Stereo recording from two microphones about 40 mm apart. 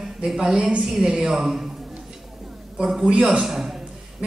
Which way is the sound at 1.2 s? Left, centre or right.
Centre.